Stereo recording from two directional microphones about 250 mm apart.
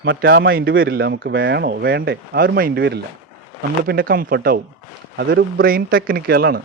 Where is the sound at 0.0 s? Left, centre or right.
Right.